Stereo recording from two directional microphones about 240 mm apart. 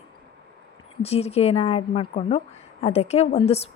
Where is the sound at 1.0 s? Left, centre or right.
Left.